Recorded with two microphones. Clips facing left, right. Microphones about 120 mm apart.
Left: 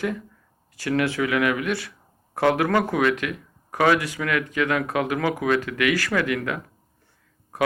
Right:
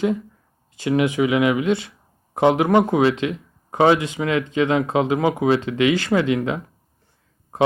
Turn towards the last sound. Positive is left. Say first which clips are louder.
# right 5 dB
turn(degrees=-20)  # may be behind; listen again after turning